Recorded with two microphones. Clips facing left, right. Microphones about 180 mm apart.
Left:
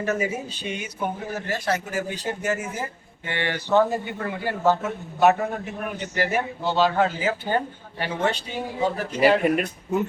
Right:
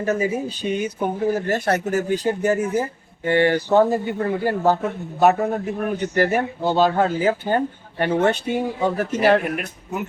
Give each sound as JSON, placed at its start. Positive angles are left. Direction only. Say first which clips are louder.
{"t": 0.0, "sound": "speech", "louder": "right 4 dB", "side_deg": -30}
{"t": 1.5, "sound": "speech", "louder": "right 5 dB", "side_deg": -60}
{"t": 1.8, "sound": "speech", "louder": "right 8 dB", "side_deg": -40}
{"t": 6.0, "sound": "speech", "louder": "right 4 dB", "side_deg": -50}